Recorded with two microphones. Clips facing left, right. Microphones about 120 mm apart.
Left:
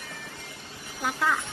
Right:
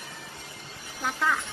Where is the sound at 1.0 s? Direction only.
5° left (ahead or behind).